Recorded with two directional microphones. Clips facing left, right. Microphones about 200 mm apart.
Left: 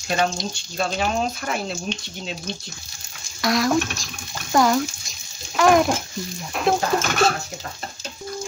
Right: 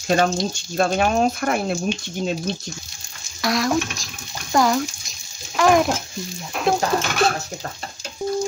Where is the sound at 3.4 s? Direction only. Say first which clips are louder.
Left 1 dB; centre (ahead or behind).